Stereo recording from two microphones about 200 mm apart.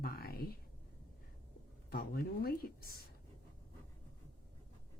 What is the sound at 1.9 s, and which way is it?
Speech, 45° left (ahead or behind).